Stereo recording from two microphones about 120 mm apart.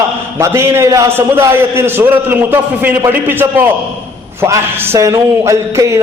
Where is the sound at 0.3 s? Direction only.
20° right (ahead or behind).